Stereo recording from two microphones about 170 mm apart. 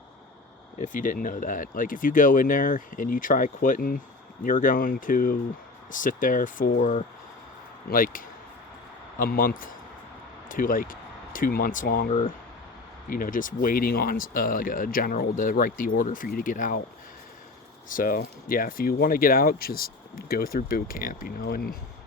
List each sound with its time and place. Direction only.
0.8 s speech: 50° left (ahead or behind)
17.8 s speech: 55° left (ahead or behind)